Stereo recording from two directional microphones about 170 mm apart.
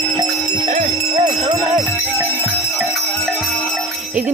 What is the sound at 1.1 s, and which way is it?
Jingle bell, 25° right (ahead or behind).